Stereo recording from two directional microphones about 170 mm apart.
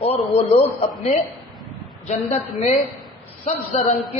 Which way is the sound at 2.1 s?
40° left (ahead or behind).